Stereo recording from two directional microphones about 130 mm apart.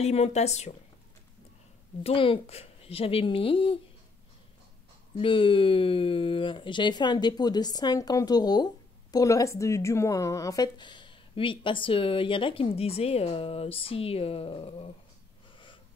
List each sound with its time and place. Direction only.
0.0 s a woman's voice: 55° left (ahead or behind)
2.0 s speech: 45° left (ahead or behind)
5.1 s speech: 40° left (ahead or behind)